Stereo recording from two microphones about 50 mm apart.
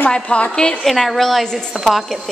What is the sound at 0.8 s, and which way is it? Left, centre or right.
A woman's voice, centre.